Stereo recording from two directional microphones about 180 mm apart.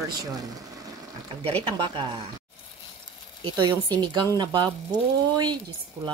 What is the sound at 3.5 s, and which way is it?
Speech, 25° right (ahead or behind).